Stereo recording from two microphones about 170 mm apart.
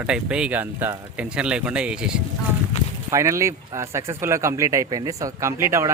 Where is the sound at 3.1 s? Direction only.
15° right (ahead or behind).